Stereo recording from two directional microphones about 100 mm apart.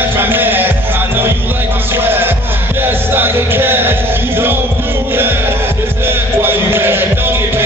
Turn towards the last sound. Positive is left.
turn(degrees=-20)  # may be behind; listen again after turning